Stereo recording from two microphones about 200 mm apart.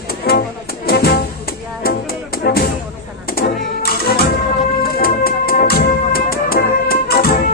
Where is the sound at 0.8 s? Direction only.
50° left (ahead or behind).